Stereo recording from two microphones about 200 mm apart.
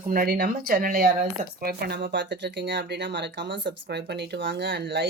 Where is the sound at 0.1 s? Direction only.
45° right (ahead or behind).